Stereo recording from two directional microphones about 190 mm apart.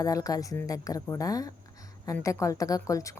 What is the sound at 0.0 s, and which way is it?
A woman's voice, 20° left (ahead or behind).